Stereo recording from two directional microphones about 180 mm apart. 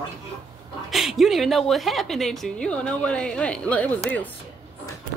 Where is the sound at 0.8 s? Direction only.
Centre (ahead or behind).